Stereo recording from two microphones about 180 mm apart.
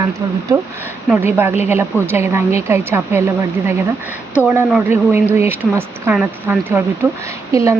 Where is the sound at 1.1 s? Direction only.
10° right (ahead or behind).